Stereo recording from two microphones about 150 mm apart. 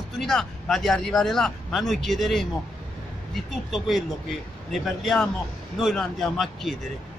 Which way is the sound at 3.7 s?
Centre (ahead or behind).